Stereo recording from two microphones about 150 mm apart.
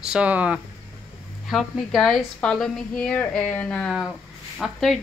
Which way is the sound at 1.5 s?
Centre (ahead or behind).